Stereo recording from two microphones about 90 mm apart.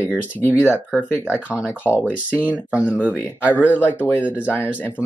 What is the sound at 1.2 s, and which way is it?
Speech, 15° right (ahead or behind).